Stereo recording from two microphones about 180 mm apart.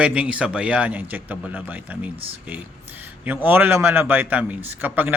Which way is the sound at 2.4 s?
10° right (ahead or behind).